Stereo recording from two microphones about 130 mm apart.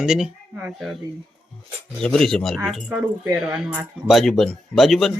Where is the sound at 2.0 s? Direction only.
5° left (ahead or behind).